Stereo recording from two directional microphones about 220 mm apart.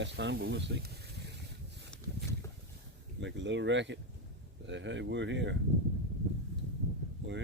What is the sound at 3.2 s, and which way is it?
Speech, 55° right (ahead or behind).